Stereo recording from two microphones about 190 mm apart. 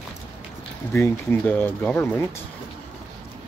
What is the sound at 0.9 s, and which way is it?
Speech, 10° left (ahead or behind).